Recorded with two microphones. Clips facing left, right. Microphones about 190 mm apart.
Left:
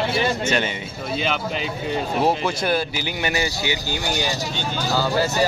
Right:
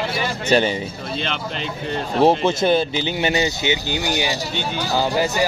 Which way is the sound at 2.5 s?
25° right (ahead or behind).